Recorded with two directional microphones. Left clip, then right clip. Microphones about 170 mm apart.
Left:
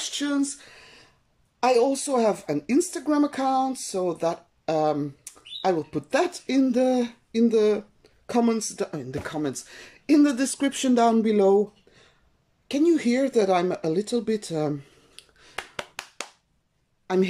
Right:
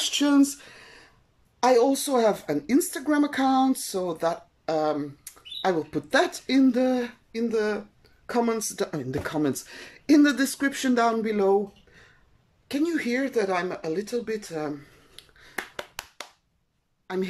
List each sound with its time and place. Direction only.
0.0 s a sound: 5° right (ahead or behind)
1.6 s speech: 10° left (ahead or behind)
12.6 s speech: 20° left (ahead or behind)
15.1 s finger snapping: 10° left (ahead or behind)
17.1 s a woman's voice: 15° left (ahead or behind)